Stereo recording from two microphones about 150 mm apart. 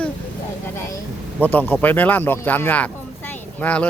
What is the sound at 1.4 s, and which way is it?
Speech, 10° left (ahead or behind).